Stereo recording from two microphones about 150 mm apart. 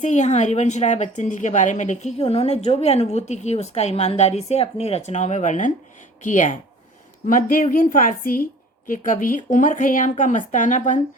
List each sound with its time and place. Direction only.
0.0 s a woman's voice: 50° left (ahead or behind)